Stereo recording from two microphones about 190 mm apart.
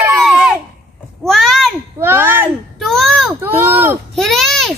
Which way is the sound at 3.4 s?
10° right (ahead or behind).